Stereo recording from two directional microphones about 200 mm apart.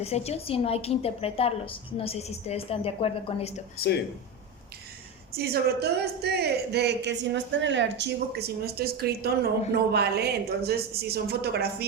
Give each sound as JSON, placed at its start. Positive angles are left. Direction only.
{"t": 0.0, "sound": "a woman's voice", "side_deg": 30}
{"t": 3.8, "sound": "speech", "side_deg": 55}
{"t": 5.3, "sound": "a woman's voice", "side_deg": -50}